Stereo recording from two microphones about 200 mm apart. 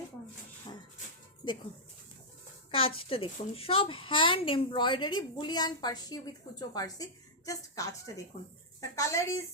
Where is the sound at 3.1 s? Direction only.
30° left (ahead or behind).